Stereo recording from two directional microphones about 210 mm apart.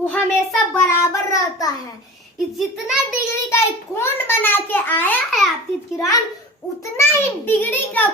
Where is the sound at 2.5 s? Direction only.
Centre (ahead or behind).